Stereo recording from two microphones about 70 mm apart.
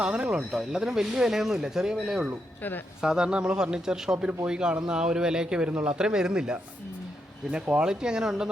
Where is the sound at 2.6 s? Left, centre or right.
Left.